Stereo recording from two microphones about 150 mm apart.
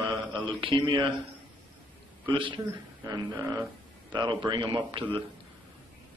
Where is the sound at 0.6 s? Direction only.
30° right (ahead or behind).